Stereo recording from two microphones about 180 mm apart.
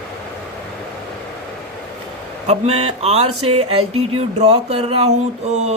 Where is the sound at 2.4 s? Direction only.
35° right (ahead or behind).